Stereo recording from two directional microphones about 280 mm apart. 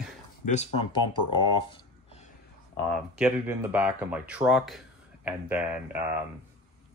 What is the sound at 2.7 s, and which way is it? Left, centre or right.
Speech, centre.